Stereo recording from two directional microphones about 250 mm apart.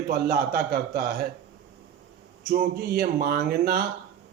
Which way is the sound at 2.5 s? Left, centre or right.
Right.